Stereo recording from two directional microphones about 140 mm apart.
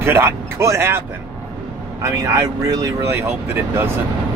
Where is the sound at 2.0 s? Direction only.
20° right (ahead or behind).